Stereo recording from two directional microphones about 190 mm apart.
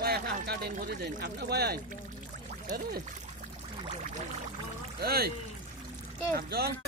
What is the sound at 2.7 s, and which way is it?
Speech, 45° right (ahead or behind).